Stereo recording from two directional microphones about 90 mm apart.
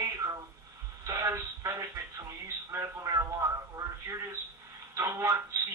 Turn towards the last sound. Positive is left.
turn(degrees=-30)  # may be behind; listen again after turning